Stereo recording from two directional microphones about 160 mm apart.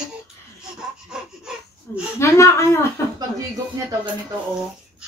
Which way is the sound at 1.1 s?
5° right (ahead or behind).